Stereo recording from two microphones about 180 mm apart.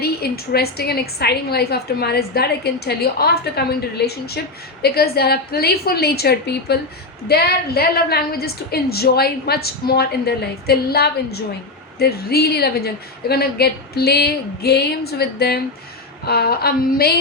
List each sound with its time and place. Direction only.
0.0 s a woman's voice: 60° left (ahead or behind)